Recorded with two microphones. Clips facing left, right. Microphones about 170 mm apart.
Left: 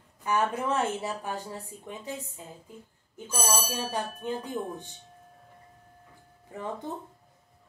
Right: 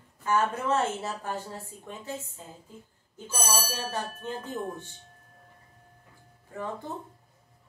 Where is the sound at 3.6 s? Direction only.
15° left (ahead or behind).